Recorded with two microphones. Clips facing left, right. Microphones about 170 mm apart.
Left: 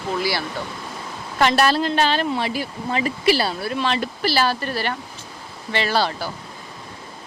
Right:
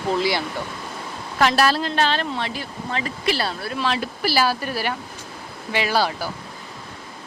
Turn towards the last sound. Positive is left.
turn(degrees=-10)  # may be behind; listen again after turning